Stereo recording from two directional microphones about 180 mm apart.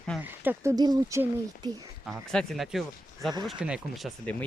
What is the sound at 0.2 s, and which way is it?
Speech, 10° right (ahead or behind).